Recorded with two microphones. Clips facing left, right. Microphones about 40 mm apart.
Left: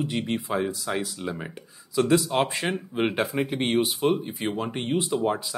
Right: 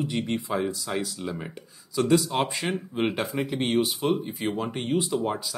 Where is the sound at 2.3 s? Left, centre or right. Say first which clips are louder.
Left 2 dB; centre.